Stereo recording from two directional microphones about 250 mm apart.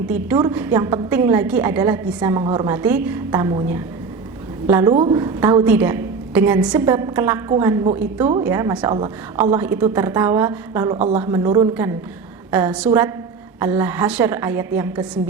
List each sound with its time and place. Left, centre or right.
0.1 s a woman's voice: centre
10.9 s a woman's voice: right
11.2 s a woman's voice: centre